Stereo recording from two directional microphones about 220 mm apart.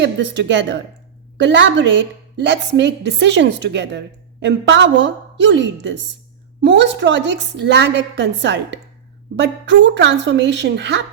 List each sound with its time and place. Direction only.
0.0 s a woman's voice: 55° right (ahead or behind)